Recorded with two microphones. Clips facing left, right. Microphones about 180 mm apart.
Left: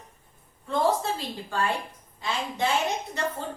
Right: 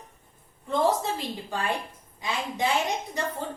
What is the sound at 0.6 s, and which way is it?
A woman's voice, 20° right (ahead or behind).